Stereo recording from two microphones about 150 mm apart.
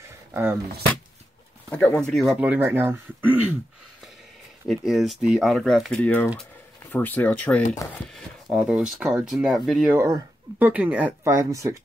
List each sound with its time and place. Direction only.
0.0 s a sound: 15° right (ahead or behind)
1.7 s speech: 5° left (ahead or behind)
2.4 s speech: 10° right (ahead or behind)
4.6 s speech: centre (ahead or behind)
8.6 s speech: 5° right (ahead or behind)
9.8 s speech: 20° right (ahead or behind)